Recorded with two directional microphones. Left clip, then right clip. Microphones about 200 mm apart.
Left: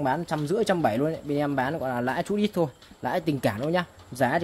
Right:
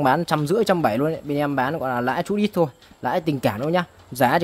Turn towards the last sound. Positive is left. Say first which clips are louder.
# right 6 dB
turn(degrees=-30)  # may be behind; listen again after turning